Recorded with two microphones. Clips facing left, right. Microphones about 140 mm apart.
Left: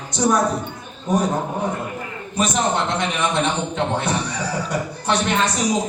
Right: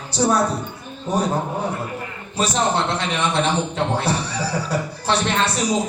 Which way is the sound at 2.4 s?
30° right (ahead or behind).